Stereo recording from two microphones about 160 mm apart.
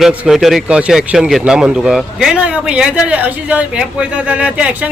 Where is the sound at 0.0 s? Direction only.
Centre (ahead or behind).